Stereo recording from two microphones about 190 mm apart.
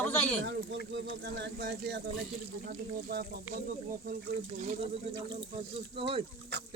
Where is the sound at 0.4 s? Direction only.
65° right (ahead or behind).